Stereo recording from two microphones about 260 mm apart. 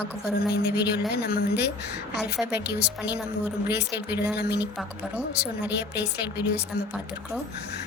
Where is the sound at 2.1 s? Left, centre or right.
Centre.